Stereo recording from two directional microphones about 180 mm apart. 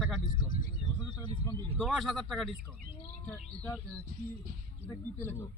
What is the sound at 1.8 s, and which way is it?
Speech, centre (ahead or behind).